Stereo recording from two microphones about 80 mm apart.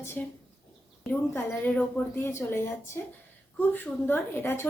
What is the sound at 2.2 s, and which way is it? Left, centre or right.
A woman's voice, left.